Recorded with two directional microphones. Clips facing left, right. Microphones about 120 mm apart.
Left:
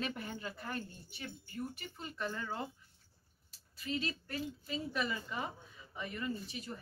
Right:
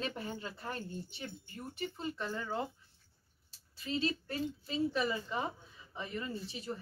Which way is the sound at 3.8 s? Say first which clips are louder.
Right 4 dB; 30° right (ahead or behind).